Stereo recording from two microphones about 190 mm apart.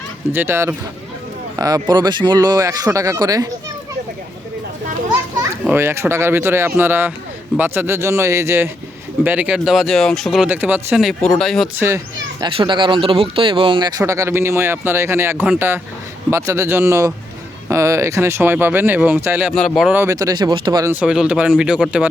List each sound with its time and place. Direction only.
0.3 s speech: 15° right (ahead or behind)
5.6 s speech: 10° right (ahead or behind)
12.4 s speech: 25° right (ahead or behind)
19.5 s speech: centre (ahead or behind); by 20.9 s 25° right (ahead or behind)
20.9 s speech: 5° right (ahead or behind)